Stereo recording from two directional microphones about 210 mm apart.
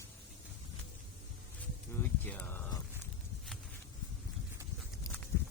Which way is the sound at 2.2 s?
10° left (ahead or behind).